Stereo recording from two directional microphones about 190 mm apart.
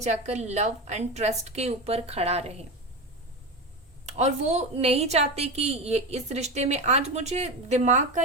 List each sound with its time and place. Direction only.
0.0 s a woman's voice: 35° right (ahead or behind)
4.0 s a woman's voice: 35° right (ahead or behind)